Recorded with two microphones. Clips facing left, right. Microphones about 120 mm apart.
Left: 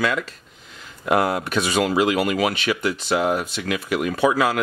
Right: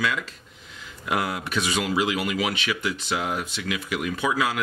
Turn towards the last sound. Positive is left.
turn(degrees=50)  # may be behind; listen again after turning